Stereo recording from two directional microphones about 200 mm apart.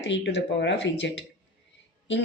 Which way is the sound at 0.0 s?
60° left (ahead or behind).